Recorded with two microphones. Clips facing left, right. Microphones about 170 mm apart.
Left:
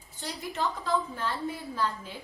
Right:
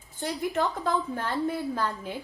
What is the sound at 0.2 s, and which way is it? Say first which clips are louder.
A woman's voice: right 5 dB; 50° right (ahead or behind).